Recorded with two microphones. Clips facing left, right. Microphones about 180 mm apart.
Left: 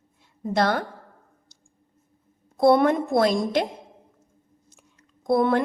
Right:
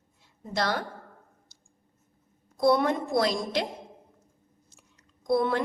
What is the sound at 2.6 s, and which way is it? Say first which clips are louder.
A woman's voice: left 5 dB; 55° left (ahead or behind).